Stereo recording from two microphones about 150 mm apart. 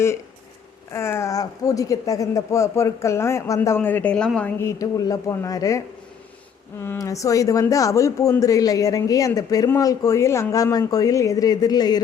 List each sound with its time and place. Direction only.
0.9 s speech: 15° left (ahead or behind)
6.8 s speech: 20° left (ahead or behind)